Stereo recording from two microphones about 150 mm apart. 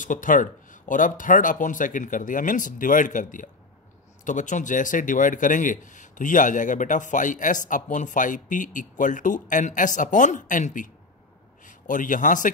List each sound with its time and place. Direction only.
0.0 s speech: 60° left (ahead or behind)